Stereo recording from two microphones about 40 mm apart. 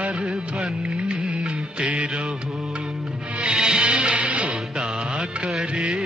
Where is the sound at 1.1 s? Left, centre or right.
Right.